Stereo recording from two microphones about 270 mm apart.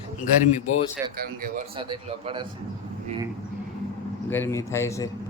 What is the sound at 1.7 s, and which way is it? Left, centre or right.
Speech, centre.